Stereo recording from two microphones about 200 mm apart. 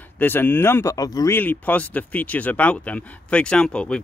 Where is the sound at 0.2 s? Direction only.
10° left (ahead or behind).